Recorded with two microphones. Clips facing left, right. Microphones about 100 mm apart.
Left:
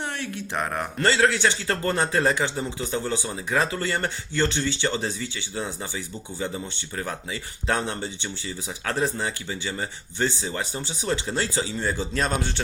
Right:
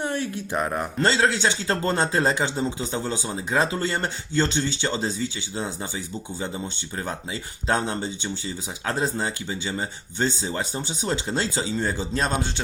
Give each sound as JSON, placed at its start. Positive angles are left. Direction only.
{"t": 0.5, "sound": "speech", "side_deg": -15}